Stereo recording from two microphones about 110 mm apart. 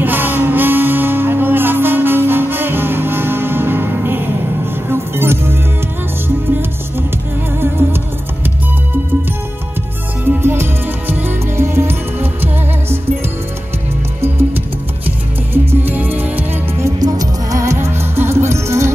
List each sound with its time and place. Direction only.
0.0 s music: 15° right (ahead or behind)
10.2 s music: 20° right (ahead or behind)
15.7 s music: 15° right (ahead or behind)
17.0 s music: 35° right (ahead or behind)